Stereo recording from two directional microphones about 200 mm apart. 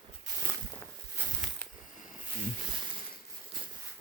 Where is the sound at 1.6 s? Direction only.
10° left (ahead or behind).